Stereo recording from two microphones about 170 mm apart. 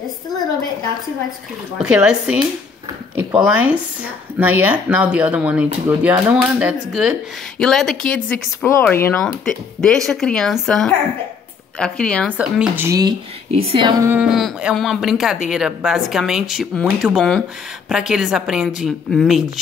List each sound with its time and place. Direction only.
1.8 s speech: 5° right (ahead or behind)
3.4 s speech: 10° right (ahead or behind); by 9.2 s 15° left (ahead or behind)
9.2 s speech: centre (ahead or behind)
12.4 s speech: 10° right (ahead or behind)
13.5 s speech: 35° right (ahead or behind)
14.0 s speech: 10° right (ahead or behind)